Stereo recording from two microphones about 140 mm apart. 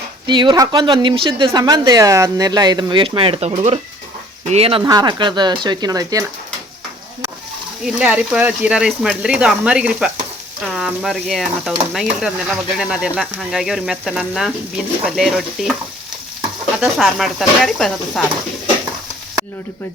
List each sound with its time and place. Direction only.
0.3 s speech: 35° right (ahead or behind)
4.8 s speech: 30° right (ahead or behind)
7.9 s speech: 10° right (ahead or behind)
10.7 s stir: 5° right (ahead or behind)
16.8 s stir: centre (ahead or behind)